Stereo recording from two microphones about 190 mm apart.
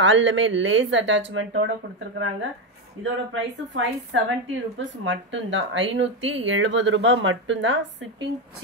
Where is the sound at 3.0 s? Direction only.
90° right.